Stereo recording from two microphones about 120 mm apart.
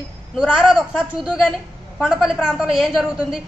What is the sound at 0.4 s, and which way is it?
A woman's voice, 5° right (ahead or behind).